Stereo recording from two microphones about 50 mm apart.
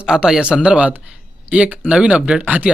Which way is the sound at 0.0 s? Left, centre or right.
Centre.